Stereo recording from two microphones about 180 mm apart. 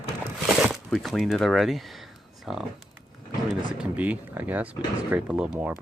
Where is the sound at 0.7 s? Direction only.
Centre (ahead or behind).